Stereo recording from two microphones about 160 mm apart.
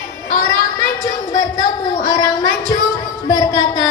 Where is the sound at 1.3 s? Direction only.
20° left (ahead or behind).